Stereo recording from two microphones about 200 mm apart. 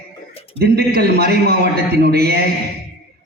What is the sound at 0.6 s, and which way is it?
A man's voice, 55° right (ahead or behind).